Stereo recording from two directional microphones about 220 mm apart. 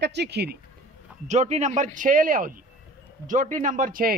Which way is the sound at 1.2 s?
30° right (ahead or behind).